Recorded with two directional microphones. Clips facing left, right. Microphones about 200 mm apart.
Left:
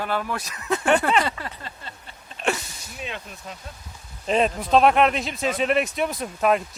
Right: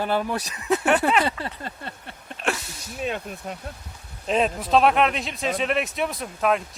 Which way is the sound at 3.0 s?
45° right (ahead or behind).